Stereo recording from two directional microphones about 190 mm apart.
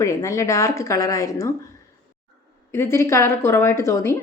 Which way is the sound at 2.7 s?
15° left (ahead or behind).